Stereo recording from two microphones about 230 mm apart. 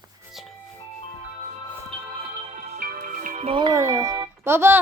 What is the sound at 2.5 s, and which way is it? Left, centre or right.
Music, right.